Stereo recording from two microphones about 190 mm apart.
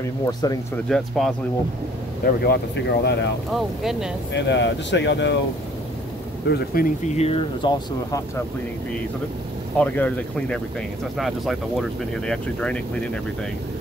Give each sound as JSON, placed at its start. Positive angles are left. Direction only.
{"t": 0.8, "sound": "speech", "side_deg": 0}
{"t": 2.2, "sound": "speech", "side_deg": 60}
{"t": 3.5, "sound": "speech", "side_deg": 0}
{"t": 4.3, "sound": "speech", "side_deg": 65}
{"t": 6.4, "sound": "speech", "side_deg": 55}
{"t": 7.2, "sound": "speech", "side_deg": 30}
{"t": 9.8, "sound": "speech", "side_deg": 5}